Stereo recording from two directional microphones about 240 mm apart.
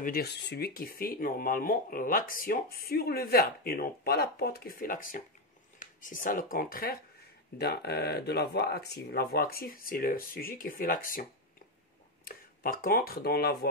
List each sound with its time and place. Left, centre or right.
0.0 s speech: left
12.3 s speech: left